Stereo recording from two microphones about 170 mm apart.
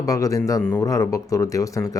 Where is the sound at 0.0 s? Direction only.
20° left (ahead or behind).